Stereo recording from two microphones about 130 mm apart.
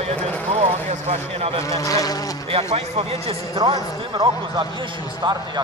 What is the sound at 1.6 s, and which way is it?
Insect, 25° left (ahead or behind).